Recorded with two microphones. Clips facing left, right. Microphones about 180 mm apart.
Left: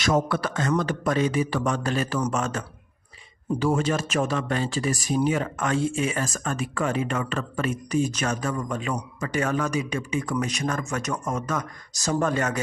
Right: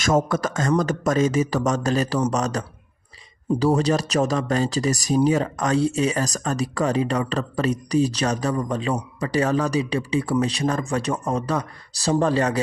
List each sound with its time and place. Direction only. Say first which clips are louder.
0.3 s speech: right 3 dB; 45° right (ahead or behind)